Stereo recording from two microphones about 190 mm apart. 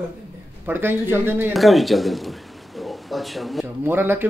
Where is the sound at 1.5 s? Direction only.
Centre (ahead or behind).